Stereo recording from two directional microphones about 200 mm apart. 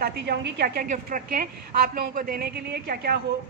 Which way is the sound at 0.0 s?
50° right (ahead or behind).